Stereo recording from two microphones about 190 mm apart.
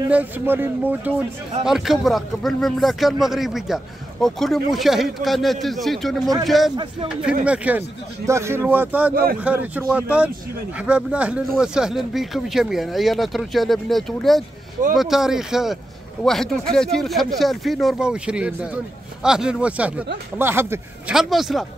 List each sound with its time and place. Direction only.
0.1 s a man's voice: 10° right (ahead or behind)
9.1 s speech: 50° right (ahead or behind)
9.4 s a man's voice: 10° right (ahead or behind)